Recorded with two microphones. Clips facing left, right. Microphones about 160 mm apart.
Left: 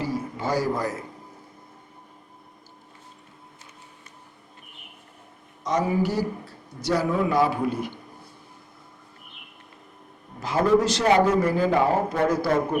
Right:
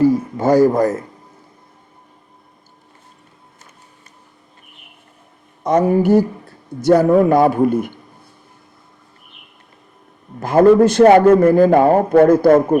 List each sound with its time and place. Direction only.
0.0 s speech: 45° right (ahead or behind)
5.6 s a man's voice: 55° right (ahead or behind)
10.4 s a man's voice: 50° right (ahead or behind)